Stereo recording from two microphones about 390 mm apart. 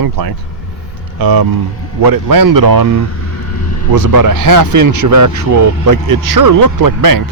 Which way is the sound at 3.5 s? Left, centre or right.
Left.